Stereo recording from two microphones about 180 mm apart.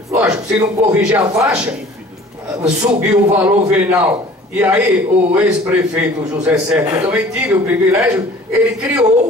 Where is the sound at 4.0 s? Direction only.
5° right (ahead or behind).